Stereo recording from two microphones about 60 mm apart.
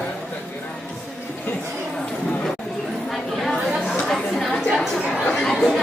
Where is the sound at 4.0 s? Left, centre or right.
Centre.